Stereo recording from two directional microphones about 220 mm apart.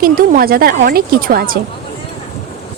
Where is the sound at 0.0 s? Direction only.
40° right (ahead or behind).